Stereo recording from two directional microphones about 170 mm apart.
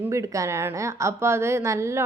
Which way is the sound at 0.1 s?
15° right (ahead or behind).